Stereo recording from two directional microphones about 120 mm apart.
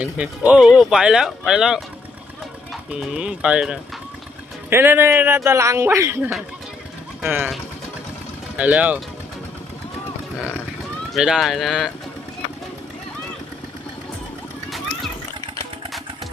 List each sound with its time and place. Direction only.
0.0 s speech: 10° right (ahead or behind)
2.9 s speech: 10° right (ahead or behind)
4.7 s a man's voice: 20° right (ahead or behind)
8.5 s speech: 10° right (ahead or behind)
11.1 s speech: centre (ahead or behind)